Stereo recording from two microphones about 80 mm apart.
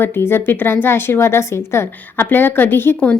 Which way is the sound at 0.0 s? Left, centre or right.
Left.